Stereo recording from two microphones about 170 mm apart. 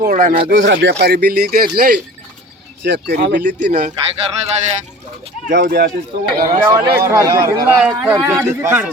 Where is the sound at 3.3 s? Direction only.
50° right (ahead or behind).